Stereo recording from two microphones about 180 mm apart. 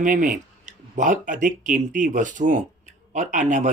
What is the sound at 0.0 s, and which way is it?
Speech, 50° right (ahead or behind).